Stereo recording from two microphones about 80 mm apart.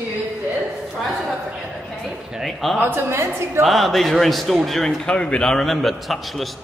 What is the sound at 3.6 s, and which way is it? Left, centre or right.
A man's voice, centre.